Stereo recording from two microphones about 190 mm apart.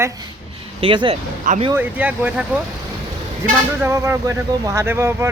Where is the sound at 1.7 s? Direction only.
10° right (ahead or behind).